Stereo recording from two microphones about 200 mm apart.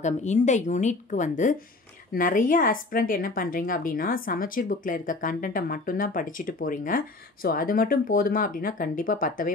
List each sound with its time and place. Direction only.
0.0 s a woman's voice: 35° left (ahead or behind)